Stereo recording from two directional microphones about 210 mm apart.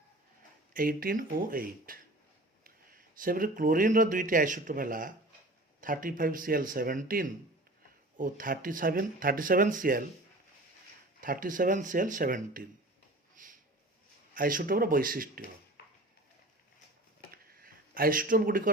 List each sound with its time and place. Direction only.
0.7 s speech: 40° right (ahead or behind)
3.2 s a man's voice: 40° right (ahead or behind)
11.2 s a man's voice: 40° right (ahead or behind)
13.3 s a sound: 40° right (ahead or behind)
14.3 s a man's voice: 40° right (ahead or behind)
17.3 s a sound: 45° right (ahead or behind)